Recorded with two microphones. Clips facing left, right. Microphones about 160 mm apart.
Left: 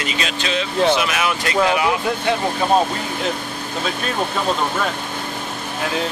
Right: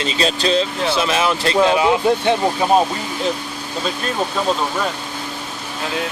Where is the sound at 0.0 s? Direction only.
30° right (ahead or behind).